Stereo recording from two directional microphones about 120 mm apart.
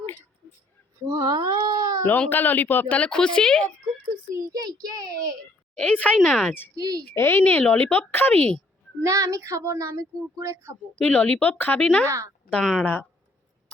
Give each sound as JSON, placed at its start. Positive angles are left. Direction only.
{"t": 1.0, "sound": "cat", "side_deg": -35}
{"t": 2.0, "sound": "a woman's voice", "side_deg": 15}
{"t": 4.4, "sound": "a child's voice", "side_deg": -30}
{"t": 5.7, "sound": "a woman's voice", "side_deg": 10}
{"t": 6.7, "sound": "a child's voice", "side_deg": -30}
{"t": 7.1, "sound": "a woman's voice", "side_deg": 20}
{"t": 9.0, "sound": "speech", "side_deg": -25}
{"t": 10.9, "sound": "a woman's voice", "side_deg": 15}
{"t": 12.8, "sound": "a woman's voice", "side_deg": 15}